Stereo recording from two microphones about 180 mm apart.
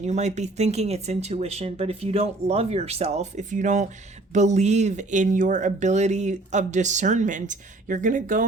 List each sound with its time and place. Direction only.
0.0 s speech: 40° right (ahead or behind)